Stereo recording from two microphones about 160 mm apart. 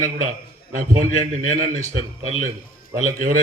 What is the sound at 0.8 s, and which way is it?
A man's voice, 55° right (ahead or behind).